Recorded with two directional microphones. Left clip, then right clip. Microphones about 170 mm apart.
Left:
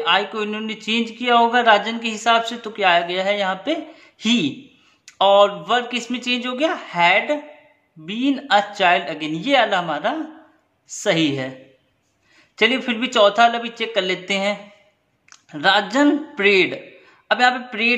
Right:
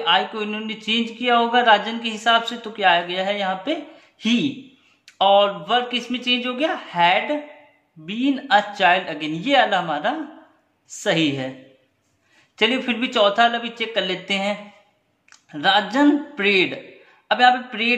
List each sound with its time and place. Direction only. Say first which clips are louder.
0.0 s a man's voice: left 1 dB; 20° left (ahead or behind)
12.5 s a man's voice: left 2 dB; 20° left (ahead or behind)